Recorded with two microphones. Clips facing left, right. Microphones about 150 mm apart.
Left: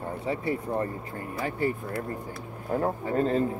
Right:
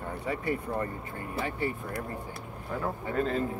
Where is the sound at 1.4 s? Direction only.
40° left (ahead or behind).